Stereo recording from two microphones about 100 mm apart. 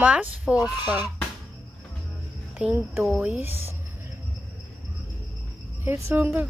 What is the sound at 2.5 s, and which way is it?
Speech, 15° right (ahead or behind).